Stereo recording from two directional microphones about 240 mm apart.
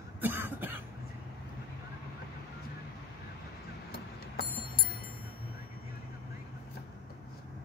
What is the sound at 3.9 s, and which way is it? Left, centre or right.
Clock, left.